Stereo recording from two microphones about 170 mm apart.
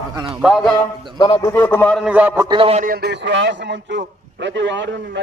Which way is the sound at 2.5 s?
35° right (ahead or behind).